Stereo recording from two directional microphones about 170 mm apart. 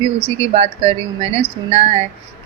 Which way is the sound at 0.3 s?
35° right (ahead or behind).